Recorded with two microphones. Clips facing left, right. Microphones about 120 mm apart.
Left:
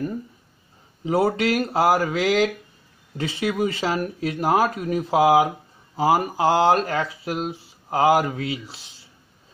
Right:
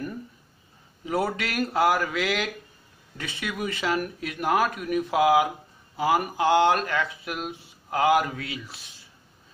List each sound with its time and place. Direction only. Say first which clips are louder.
1.0 s speech: left 7 dB; 30° left (ahead or behind)